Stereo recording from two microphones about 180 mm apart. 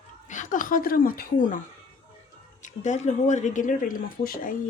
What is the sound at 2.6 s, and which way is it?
Speech, 40° left (ahead or behind).